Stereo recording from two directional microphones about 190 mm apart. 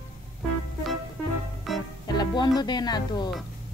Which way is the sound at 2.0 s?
20° left (ahead or behind).